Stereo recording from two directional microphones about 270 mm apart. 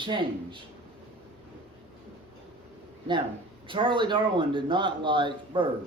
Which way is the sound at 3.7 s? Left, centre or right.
Centre.